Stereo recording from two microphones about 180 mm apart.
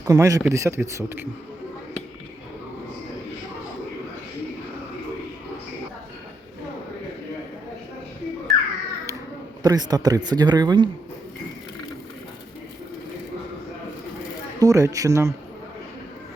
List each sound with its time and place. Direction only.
0.0 s a man's voice: 15° right (ahead or behind)
8.5 s bird: centre (ahead or behind)
9.6 s speech: 20° right (ahead or behind)
14.6 s a man's voice: 20° right (ahead or behind)